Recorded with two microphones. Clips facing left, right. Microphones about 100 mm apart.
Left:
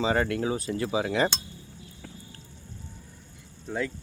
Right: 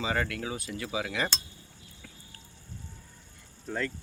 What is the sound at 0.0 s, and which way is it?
Cutlery, 30° left (ahead or behind).